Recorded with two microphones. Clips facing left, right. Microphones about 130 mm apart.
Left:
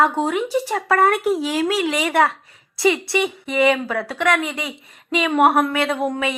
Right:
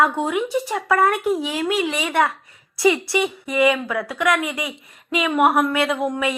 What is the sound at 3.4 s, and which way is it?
Speech, 25° left (ahead or behind).